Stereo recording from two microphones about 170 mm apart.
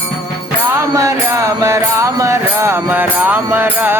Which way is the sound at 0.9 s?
15° right (ahead or behind).